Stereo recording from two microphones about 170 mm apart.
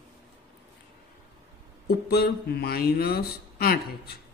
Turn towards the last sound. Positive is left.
turn(degrees=65)  # may be behind; listen again after turning